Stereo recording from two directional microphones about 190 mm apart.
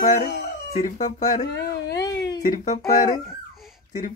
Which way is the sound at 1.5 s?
60° left (ahead or behind).